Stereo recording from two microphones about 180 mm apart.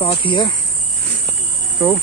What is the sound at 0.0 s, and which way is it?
Speech, 30° left (ahead or behind).